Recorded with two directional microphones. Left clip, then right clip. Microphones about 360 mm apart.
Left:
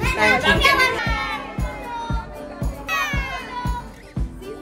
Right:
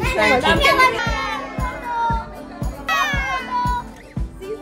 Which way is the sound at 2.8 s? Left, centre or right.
Right.